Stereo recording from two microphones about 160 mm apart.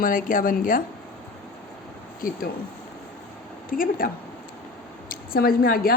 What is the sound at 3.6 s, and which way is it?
Speech, 60° left (ahead or behind).